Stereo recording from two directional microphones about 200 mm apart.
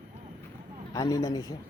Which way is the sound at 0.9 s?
15° left (ahead or behind).